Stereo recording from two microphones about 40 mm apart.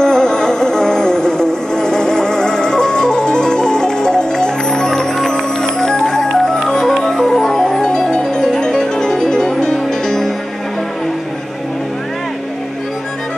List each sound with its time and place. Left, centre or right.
0.0 s music: centre